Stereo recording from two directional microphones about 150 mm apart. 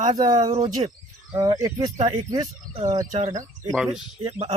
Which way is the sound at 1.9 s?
50° right (ahead or behind).